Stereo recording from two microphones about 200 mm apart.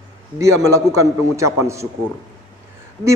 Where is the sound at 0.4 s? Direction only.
15° right (ahead or behind).